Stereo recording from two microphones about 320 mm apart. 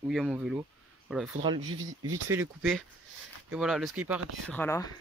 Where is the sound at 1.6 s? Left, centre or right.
Right.